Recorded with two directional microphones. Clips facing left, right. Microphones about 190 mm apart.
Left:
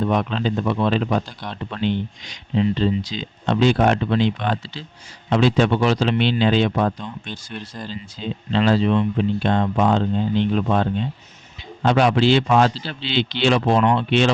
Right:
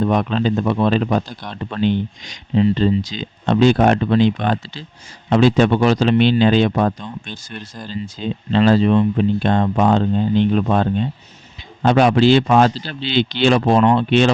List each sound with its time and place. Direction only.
0.0 s speech: 45° right (ahead or behind)
7.0 s speech: 5° right (ahead or behind)
8.5 s speech: 45° right (ahead or behind)